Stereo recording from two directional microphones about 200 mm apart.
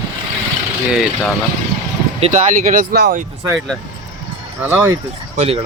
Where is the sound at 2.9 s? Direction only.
55° right (ahead or behind).